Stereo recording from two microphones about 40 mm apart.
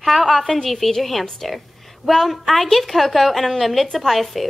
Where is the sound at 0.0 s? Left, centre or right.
Centre.